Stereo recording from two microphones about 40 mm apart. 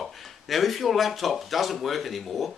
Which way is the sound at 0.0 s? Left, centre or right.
Centre.